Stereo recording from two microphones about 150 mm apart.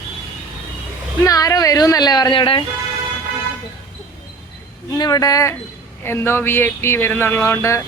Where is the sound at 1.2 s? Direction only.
20° left (ahead or behind).